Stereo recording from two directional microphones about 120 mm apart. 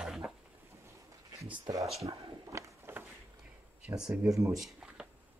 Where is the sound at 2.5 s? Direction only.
20° right (ahead or behind).